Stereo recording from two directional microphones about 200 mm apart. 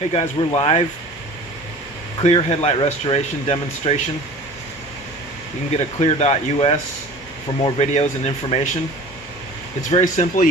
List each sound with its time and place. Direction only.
0.1 s speech: 30° left (ahead or behind)
2.2 s speech: 30° left (ahead or behind)
5.7 s speech: 30° left (ahead or behind)
9.9 s speech: 35° left (ahead or behind)